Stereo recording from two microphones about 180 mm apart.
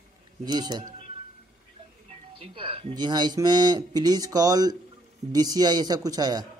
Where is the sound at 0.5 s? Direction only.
25° right (ahead or behind).